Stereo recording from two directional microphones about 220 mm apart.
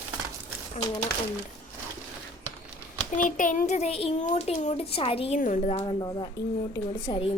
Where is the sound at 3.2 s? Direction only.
35° left (ahead or behind).